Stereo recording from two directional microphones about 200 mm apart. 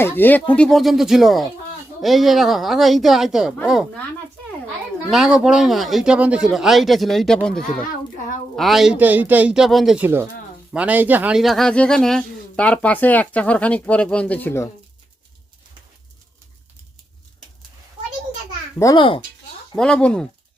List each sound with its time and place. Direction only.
0.0 s speech: 10° left (ahead or behind)
5.1 s speech: centre (ahead or behind)
18.8 s a child's voice: 20° left (ahead or behind)
19.7 s speech: 5° left (ahead or behind)